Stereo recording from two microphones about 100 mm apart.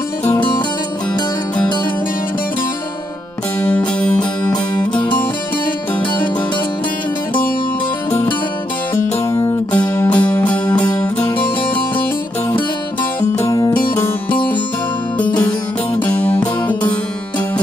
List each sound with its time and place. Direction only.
4.0 s music: 10° left (ahead or behind)
4.5 s music: 40° left (ahead or behind)
8.9 s music: 25° left (ahead or behind)
10.0 s music: 15° left (ahead or behind)
13.5 s music: 35° left (ahead or behind)
16.0 s music: 15° left (ahead or behind)